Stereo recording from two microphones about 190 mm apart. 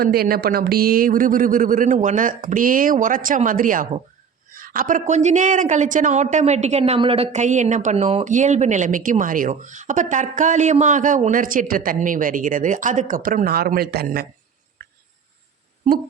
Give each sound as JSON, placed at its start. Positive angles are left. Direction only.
{"t": 0.0, "sound": "a woman's voice", "side_deg": -50}